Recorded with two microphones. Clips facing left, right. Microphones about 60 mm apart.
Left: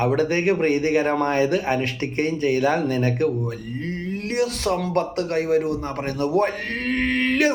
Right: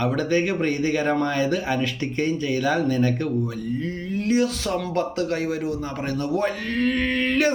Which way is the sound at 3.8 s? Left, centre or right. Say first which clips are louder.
Right 2 dB; left.